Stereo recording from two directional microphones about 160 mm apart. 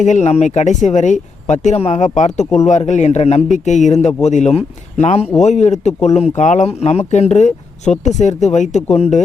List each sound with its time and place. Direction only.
0.0 s a man's voice: 45° left (ahead or behind)